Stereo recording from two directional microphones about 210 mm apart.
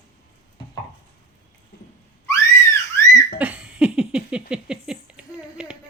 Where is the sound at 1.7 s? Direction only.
50° left (ahead or behind).